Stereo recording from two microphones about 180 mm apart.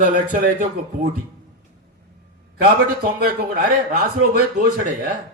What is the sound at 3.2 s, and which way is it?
Speech, 55° right (ahead or behind).